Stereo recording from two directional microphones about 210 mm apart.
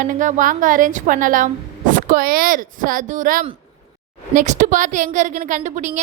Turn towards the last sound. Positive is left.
turn(degrees=-35)  # may be behind; listen again after turning